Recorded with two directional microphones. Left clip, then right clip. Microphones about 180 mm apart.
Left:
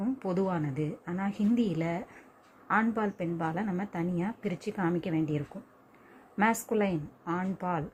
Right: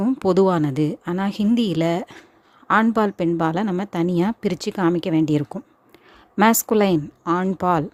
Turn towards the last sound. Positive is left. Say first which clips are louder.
# right 13 dB
turn(degrees=-50)  # may be behind; listen again after turning